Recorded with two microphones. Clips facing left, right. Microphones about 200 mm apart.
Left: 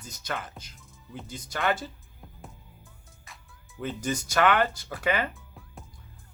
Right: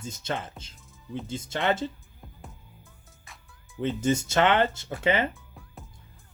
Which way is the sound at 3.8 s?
25° right (ahead or behind).